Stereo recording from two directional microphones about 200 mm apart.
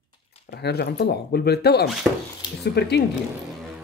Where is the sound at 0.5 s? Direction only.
55° left (ahead or behind).